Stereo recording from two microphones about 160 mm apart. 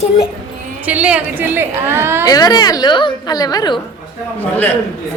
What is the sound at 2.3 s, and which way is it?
A woman's voice, 25° left (ahead or behind).